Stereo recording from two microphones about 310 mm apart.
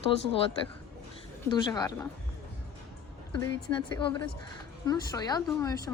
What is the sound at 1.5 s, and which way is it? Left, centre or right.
Speech, centre.